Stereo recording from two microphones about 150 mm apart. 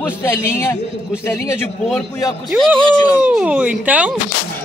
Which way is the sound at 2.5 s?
10° right (ahead or behind).